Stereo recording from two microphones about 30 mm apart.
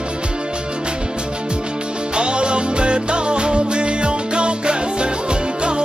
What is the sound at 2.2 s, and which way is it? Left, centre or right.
Music, right.